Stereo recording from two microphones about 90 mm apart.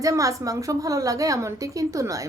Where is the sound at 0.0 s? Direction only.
40° right (ahead or behind).